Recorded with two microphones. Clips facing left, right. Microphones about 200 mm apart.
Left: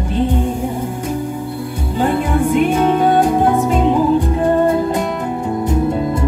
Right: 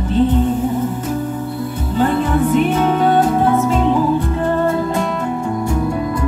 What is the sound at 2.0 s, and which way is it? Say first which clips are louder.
Music: even; 15° left (ahead or behind).